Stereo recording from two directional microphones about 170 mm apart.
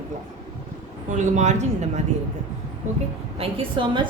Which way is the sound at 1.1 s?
45° right (ahead or behind).